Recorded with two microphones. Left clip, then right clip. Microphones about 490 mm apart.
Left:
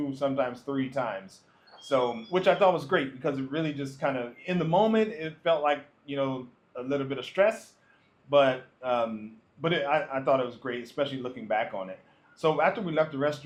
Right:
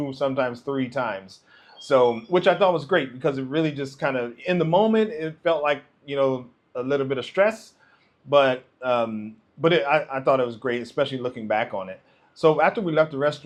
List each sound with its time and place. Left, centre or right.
0.2 s speech: right